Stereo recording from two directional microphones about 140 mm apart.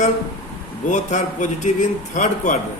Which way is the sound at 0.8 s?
60° left (ahead or behind).